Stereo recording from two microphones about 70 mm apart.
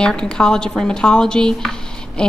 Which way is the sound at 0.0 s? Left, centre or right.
Centre.